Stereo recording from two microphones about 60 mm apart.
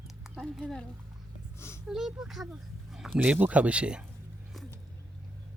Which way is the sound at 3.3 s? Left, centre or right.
Right.